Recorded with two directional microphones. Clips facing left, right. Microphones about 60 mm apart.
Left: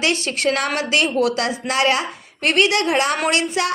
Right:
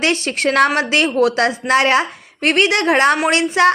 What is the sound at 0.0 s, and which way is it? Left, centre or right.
A woman's voice, right.